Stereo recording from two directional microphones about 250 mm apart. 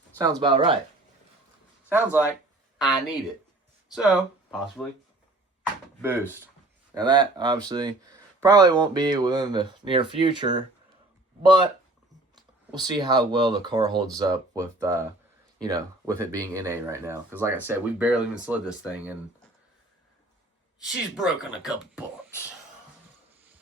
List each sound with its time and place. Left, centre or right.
0.2 s speech: centre
1.9 s speech: centre
6.0 s speech: centre
12.7 s speech: centre
20.8 s speech: centre